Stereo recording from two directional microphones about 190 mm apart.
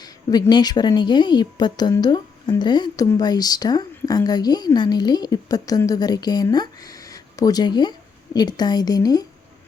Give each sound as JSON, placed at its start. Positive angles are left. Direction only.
{"t": 0.0, "sound": "a woman's voice", "side_deg": 20}